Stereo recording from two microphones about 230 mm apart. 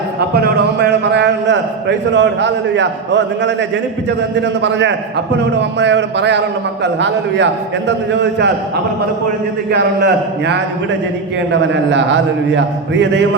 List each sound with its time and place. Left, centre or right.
0.3 s a man's voice: right
9.7 s a man's voice: right
11.7 s a man's voice: right